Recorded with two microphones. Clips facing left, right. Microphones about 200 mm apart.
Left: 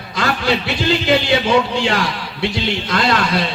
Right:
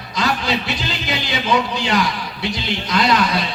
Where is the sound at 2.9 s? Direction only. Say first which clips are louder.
Right 2 dB; 55° left (ahead or behind).